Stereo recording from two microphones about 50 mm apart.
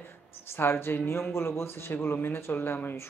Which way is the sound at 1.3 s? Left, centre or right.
Left.